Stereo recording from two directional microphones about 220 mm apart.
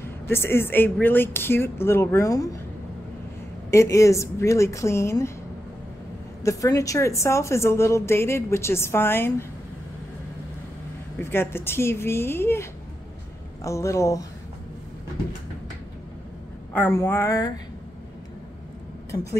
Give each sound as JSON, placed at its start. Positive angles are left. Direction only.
{"t": 0.0, "sound": "a woman's voice", "side_deg": 10}
{"t": 3.7, "sound": "a woman's voice", "side_deg": 15}
{"t": 6.4, "sound": "a woman's voice", "side_deg": 15}
{"t": 11.1, "sound": "a woman's voice", "side_deg": 10}
{"t": 13.7, "sound": "a woman's voice", "side_deg": 15}
{"t": 16.7, "sound": "a woman's voice", "side_deg": 10}